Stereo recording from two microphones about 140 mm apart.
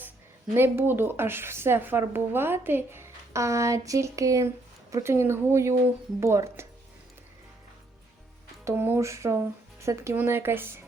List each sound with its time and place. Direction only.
0.5 s speech: 15° right (ahead or behind)
8.6 s speech: 15° right (ahead or behind)